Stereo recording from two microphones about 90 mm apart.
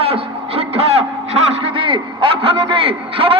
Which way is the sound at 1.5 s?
85° right.